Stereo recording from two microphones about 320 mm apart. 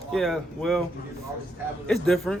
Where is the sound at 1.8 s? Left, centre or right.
Centre.